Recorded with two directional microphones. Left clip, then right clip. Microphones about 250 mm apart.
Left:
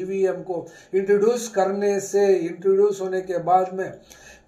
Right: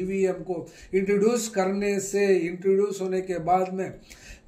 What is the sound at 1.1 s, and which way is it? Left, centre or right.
A man's voice, right.